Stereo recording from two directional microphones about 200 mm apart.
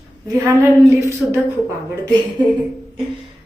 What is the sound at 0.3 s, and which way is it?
A woman's voice, 15° right (ahead or behind).